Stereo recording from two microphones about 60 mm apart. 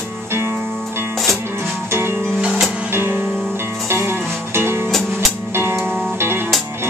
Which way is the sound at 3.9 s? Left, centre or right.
Right.